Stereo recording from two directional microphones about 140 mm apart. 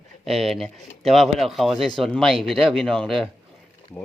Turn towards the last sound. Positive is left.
turn(degrees=5)  # may be behind; listen again after turning